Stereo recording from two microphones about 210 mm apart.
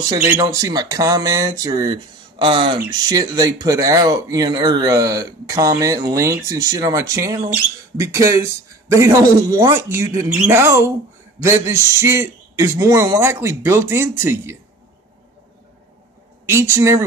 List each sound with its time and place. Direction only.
0.2 s speech: 15° right (ahead or behind)
16.4 s speech: 10° right (ahead or behind)